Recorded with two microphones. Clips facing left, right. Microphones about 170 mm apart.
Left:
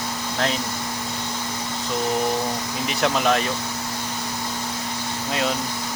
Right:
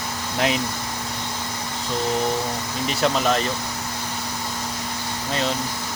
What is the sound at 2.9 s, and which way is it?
Speech, centre (ahead or behind).